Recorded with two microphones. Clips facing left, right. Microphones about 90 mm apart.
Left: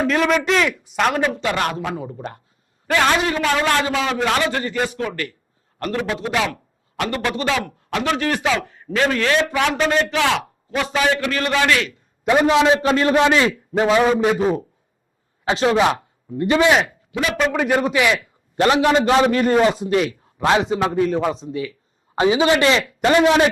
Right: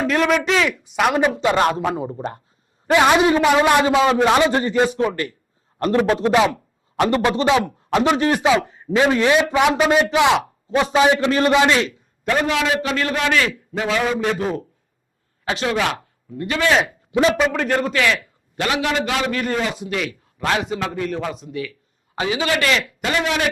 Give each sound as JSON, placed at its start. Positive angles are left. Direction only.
{"t": 0.0, "sound": "a man's voice", "side_deg": 0}
{"t": 1.1, "sound": "a man's voice", "side_deg": -15}
{"t": 2.8, "sound": "a man's voice", "side_deg": -15}
{"t": 6.0, "sound": "a man's voice", "side_deg": -40}
{"t": 6.3, "sound": "a man's voice", "side_deg": -20}
{"t": 12.2, "sound": "a man's voice", "side_deg": 15}
{"t": 14.3, "sound": "a man's voice", "side_deg": 15}
{"t": 15.4, "sound": "a man's voice", "side_deg": 25}
{"t": 17.1, "sound": "a man's voice", "side_deg": -30}
{"t": 17.3, "sound": "a man's voice", "side_deg": 0}
{"t": 17.6, "sound": "a man's voice", "side_deg": 10}
{"t": 18.5, "sound": "a man's voice", "side_deg": 35}
{"t": 23.0, "sound": "a man's voice", "side_deg": 35}